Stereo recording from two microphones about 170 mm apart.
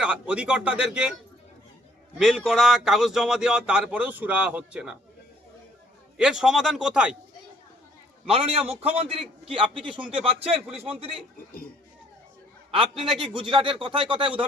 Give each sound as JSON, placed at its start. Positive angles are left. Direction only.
{"t": 0.0, "sound": "speech", "side_deg": -5}
{"t": 2.1, "sound": "speech", "side_deg": 0}
{"t": 6.1, "sound": "speech", "side_deg": -5}
{"t": 8.3, "sound": "speech", "side_deg": -35}
{"t": 12.9, "sound": "speech", "side_deg": 0}
{"t": 13.4, "sound": "speech", "side_deg": -30}